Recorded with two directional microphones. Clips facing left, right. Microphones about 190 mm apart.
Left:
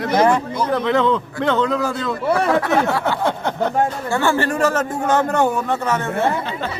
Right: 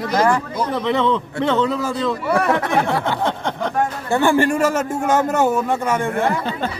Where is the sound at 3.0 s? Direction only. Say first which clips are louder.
Left 1 dB; 5° left (ahead or behind).